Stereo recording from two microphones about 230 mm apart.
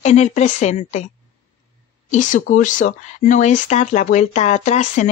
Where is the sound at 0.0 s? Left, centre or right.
Left.